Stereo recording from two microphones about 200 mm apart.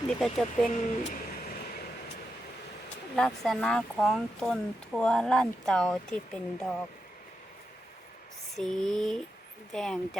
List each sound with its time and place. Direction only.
0.2 s speech: centre (ahead or behind)
0.7 s a sound: 40° left (ahead or behind)
3.2 s speech: centre (ahead or behind)
8.5 s speech: centre (ahead or behind)